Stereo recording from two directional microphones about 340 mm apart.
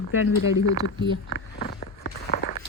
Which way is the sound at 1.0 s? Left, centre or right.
Left.